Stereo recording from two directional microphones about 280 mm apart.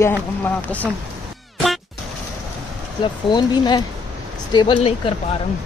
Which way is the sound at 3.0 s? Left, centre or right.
Centre.